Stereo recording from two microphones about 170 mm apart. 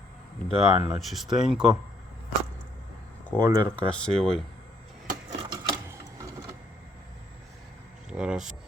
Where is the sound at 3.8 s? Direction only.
5° left (ahead or behind).